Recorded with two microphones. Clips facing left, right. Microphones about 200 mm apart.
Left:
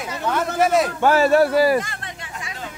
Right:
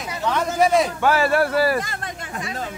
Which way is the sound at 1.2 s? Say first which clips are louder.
Left 3 dB; 15° left (ahead or behind).